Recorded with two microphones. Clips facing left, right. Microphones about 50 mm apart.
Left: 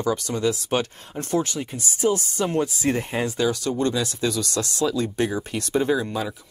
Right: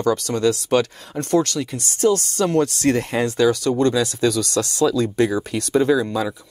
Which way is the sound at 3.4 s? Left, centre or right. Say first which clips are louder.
Right 7 dB; right.